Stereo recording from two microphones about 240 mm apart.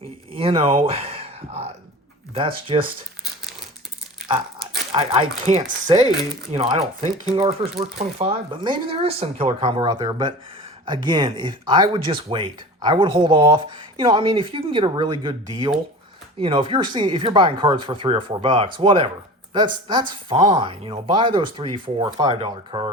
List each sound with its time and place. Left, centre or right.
0.0 s a sound: right
2.7 s speech: right
4.9 s speech: right